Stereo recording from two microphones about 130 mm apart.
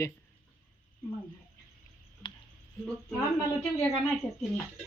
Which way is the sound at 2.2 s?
35° left (ahead or behind).